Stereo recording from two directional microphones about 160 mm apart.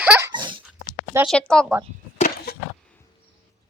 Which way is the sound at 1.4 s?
5° left (ahead or behind).